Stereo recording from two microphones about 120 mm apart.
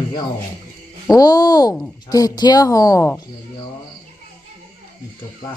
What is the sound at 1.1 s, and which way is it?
Speech, 30° left (ahead or behind).